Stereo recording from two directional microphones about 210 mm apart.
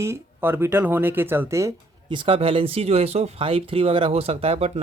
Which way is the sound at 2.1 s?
25° right (ahead or behind).